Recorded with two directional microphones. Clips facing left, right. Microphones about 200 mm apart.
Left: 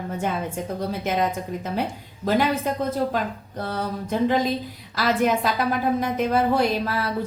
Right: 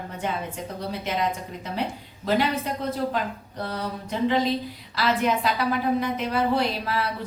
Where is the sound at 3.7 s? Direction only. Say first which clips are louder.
Left 4 dB; 45° left (ahead or behind).